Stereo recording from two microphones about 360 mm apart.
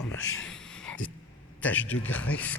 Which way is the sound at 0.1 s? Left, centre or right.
Left.